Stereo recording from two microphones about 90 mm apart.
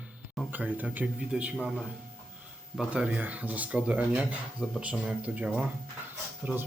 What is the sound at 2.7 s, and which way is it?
Speech, 15° right (ahead or behind).